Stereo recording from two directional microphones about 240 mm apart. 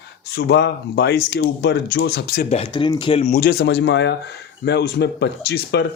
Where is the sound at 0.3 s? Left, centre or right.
Left.